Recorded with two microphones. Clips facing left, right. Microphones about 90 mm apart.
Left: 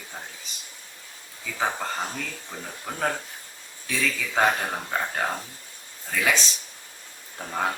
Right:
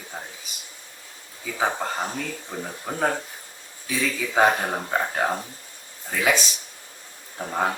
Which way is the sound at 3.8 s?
15° right (ahead or behind).